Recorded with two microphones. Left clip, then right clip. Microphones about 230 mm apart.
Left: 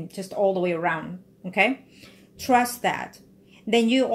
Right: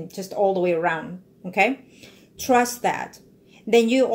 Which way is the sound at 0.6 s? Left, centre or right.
Left.